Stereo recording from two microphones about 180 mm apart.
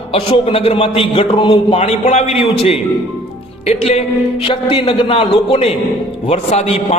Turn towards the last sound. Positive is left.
turn(degrees=35)  # may be behind; listen again after turning